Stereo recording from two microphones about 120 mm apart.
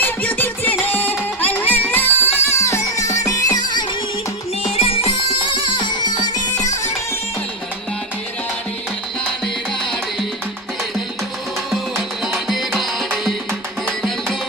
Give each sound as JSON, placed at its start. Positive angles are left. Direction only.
{"t": 0.0, "sound": "music", "side_deg": 15}
{"t": 4.6, "sound": "music", "side_deg": 55}
{"t": 11.7, "sound": "music", "side_deg": 0}